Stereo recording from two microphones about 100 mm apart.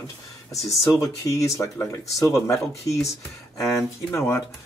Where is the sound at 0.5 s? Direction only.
30° left (ahead or behind).